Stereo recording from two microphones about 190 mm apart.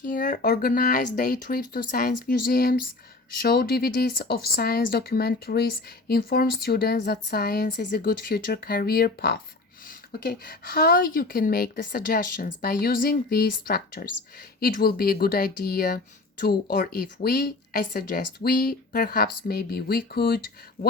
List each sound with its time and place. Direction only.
0.0 s speech: 45° left (ahead or behind)